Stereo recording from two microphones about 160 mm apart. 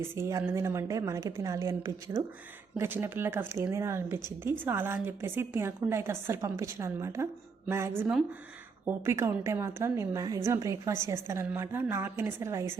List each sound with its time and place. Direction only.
0.2 s a woman's voice: 15° right (ahead or behind)